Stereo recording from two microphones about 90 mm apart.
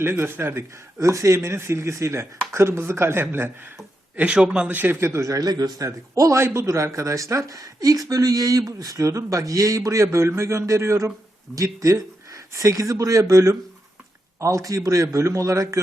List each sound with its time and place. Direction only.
0.0 s speech: 25° right (ahead or behind)
0.9 s speech: 35° right (ahead or behind)
4.2 s a man's voice: 10° right (ahead or behind); by 15.8 s 35° right (ahead or behind)